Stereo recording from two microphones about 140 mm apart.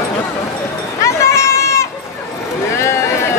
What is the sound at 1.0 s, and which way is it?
Run, 20° left (ahead or behind).